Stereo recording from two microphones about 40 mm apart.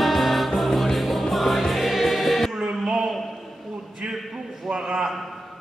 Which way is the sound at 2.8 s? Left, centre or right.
Centre.